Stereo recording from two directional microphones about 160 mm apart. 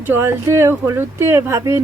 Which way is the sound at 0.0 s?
15° right (ahead or behind).